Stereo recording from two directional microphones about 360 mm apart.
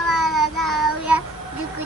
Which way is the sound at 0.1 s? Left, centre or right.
Centre.